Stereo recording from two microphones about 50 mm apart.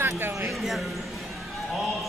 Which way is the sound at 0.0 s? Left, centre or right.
Right.